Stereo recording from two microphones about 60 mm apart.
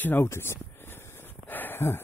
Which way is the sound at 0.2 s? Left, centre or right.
Left.